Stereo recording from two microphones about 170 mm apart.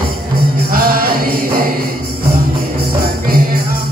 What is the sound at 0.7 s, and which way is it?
Music, 60° right (ahead or behind).